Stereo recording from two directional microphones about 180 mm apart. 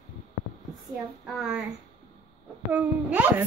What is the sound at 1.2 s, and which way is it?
Speech, centre (ahead or behind).